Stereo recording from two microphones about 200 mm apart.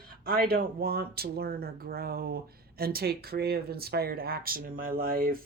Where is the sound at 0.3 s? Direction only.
50° right (ahead or behind).